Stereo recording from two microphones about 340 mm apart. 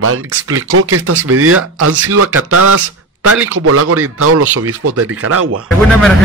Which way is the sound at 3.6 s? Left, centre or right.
Right.